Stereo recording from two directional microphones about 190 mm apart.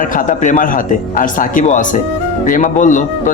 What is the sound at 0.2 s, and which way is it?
Speech, 40° left (ahead or behind).